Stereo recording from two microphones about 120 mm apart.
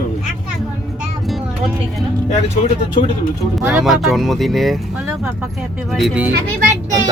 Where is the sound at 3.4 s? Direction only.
5° right (ahead or behind).